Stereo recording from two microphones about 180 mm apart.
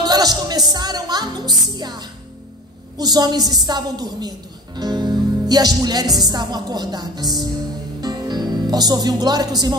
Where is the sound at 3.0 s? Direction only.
20° right (ahead or behind).